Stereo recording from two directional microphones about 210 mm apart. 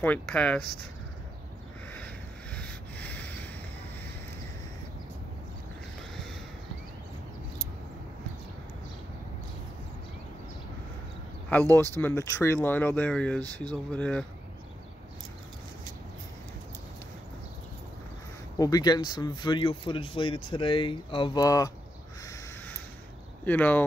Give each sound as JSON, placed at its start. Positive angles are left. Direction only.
{"t": 0.0, "sound": "speech", "side_deg": 5}
{"t": 2.5, "sound": "snort", "side_deg": 5}
{"t": 12.0, "sound": "speech", "side_deg": 15}
{"t": 18.6, "sound": "speech", "side_deg": 20}
{"t": 22.2, "sound": "crow", "side_deg": 15}
{"t": 23.4, "sound": "speech", "side_deg": 10}